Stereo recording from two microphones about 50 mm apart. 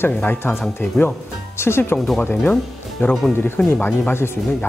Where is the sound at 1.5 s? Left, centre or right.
Left.